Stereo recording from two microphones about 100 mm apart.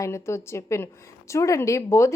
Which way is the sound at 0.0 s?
30° left (ahead or behind).